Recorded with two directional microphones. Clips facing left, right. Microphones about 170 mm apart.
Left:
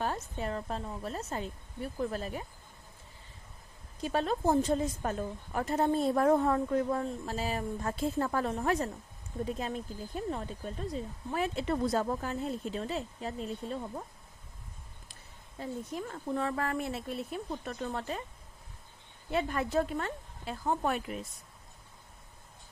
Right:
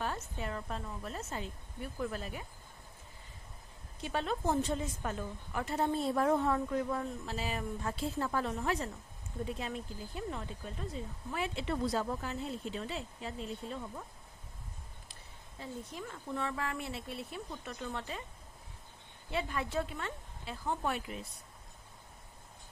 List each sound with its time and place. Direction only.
0.3 s speech: 35° left (ahead or behind)
4.0 s a woman's voice: 40° left (ahead or behind)
15.6 s a woman's voice: 45° left (ahead or behind)
19.3 s a woman's voice: 45° left (ahead or behind)